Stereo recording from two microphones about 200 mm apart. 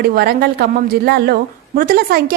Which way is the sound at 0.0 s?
50° right (ahead or behind).